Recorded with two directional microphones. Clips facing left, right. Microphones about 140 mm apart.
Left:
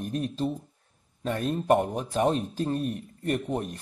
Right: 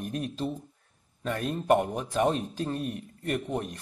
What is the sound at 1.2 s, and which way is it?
Speech, 35° left (ahead or behind).